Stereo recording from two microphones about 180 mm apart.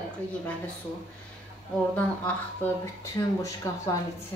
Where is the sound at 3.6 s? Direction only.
20° left (ahead or behind).